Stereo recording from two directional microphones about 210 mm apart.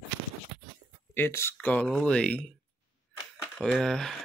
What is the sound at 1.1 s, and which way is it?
Speech, 10° left (ahead or behind).